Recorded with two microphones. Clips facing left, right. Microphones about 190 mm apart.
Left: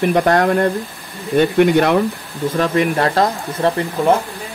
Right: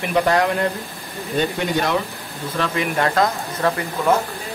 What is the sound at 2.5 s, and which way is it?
Speech, 40° left (ahead or behind).